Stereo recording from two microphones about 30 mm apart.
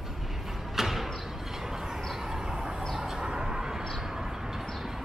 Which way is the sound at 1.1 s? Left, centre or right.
Centre.